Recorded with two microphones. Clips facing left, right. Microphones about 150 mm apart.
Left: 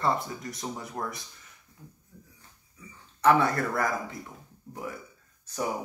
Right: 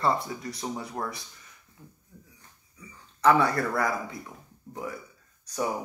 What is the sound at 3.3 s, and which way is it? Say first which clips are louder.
Speech: even; 30° right (ahead or behind).